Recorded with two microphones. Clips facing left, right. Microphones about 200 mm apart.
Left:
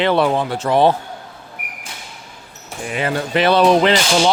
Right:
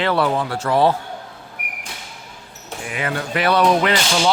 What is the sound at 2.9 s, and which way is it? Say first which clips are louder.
Speech: left 4 dB; 30° left (ahead or behind).